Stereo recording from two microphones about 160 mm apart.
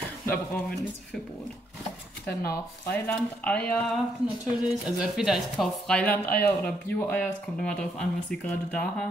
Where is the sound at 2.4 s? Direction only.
20° left (ahead or behind).